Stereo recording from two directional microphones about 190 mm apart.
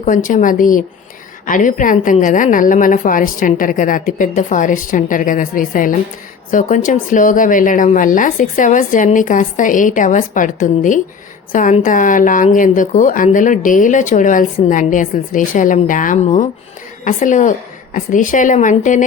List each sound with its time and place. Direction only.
0.0 s a woman's voice: 45° left (ahead or behind)